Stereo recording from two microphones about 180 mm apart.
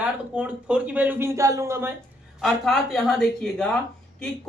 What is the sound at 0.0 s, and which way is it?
A man's voice, 5° right (ahead or behind).